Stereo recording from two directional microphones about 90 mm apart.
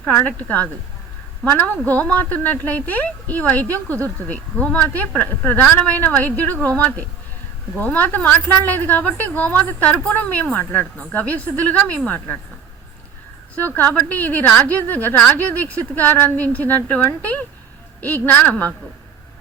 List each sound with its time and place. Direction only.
0.0 s a woman's voice: 15° left (ahead or behind)
7.8 s a woman's voice: 15° left (ahead or behind)
13.6 s a woman's voice: 20° left (ahead or behind)